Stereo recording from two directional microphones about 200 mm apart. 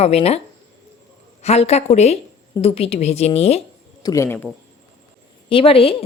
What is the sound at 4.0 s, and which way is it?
Speech, 15° left (ahead or behind).